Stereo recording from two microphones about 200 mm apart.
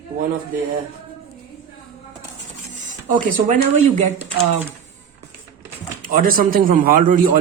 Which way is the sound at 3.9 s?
35° right (ahead or behind).